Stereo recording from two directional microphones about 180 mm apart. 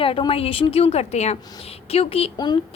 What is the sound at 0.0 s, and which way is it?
A woman's voice, 30° left (ahead or behind).